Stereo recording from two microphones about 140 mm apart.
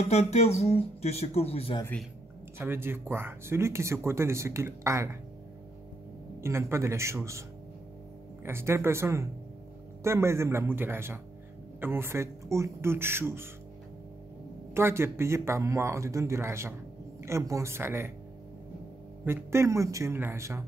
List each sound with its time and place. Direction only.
0.1 s speech: 50° left (ahead or behind)
2.6 s speech: 15° right (ahead or behind)
6.4 s speech: 20° right (ahead or behind)
8.5 s speech: 20° right (ahead or behind)
14.7 s speech: 15° right (ahead or behind)
19.2 s speech: 20° right (ahead or behind)